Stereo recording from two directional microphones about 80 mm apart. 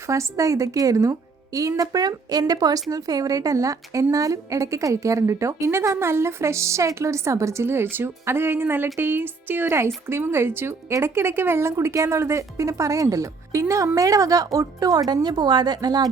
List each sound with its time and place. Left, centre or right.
0.1 s a woman's voice: right